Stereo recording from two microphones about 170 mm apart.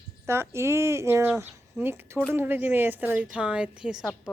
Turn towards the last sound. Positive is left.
turn(degrees=-5)  # may be behind; listen again after turning